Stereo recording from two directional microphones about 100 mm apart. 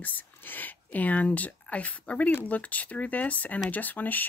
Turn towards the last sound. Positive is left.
turn(degrees=20)  # may be behind; listen again after turning